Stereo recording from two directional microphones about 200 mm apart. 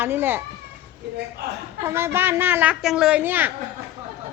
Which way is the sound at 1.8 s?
15° right (ahead or behind).